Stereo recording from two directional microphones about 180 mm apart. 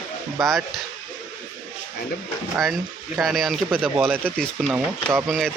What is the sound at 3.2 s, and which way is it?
Speech, centre (ahead or behind).